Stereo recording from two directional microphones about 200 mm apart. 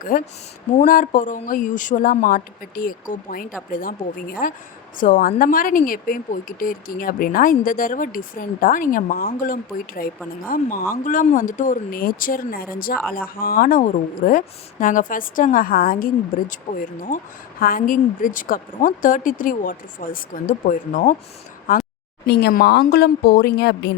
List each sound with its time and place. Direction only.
0.0 s speech: 45° left (ahead or behind)